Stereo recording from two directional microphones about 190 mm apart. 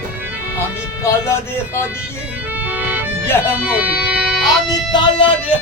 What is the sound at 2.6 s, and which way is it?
Music, 10° right (ahead or behind).